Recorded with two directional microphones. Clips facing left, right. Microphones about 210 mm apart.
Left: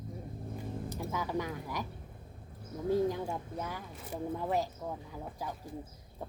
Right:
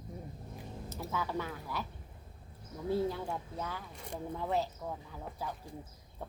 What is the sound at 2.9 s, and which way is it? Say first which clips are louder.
Speech: left 3 dB; 15° left (ahead or behind).